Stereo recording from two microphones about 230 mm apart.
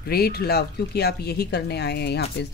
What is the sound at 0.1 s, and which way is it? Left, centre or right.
Speech, left.